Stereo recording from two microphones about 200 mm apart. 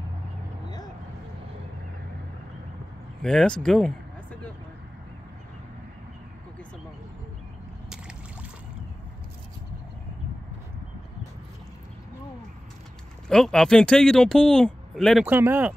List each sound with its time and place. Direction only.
3.2 s speech: 5° left (ahead or behind)
13.3 s speech: 5° left (ahead or behind)